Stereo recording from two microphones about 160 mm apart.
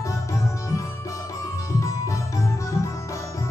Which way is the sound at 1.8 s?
20° left (ahead or behind).